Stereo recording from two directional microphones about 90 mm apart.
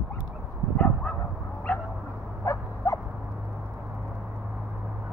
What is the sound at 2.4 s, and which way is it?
Dog, 35° left (ahead or behind).